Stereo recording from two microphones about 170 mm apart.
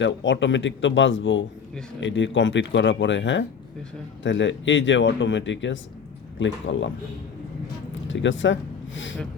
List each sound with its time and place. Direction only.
0.0 s speech: 90° left
8.0 s speech: 90° left